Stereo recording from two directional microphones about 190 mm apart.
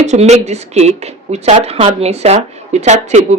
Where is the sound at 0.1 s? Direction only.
35° right (ahead or behind).